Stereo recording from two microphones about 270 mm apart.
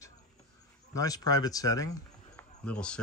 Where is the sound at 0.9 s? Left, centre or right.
Centre.